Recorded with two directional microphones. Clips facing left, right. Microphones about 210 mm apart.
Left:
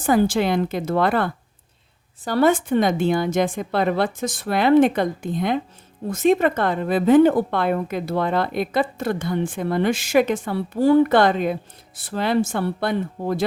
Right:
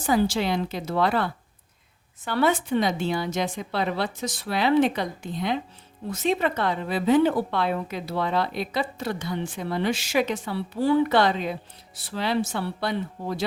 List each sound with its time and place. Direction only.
0.0 s a woman's voice: 50° left (ahead or behind)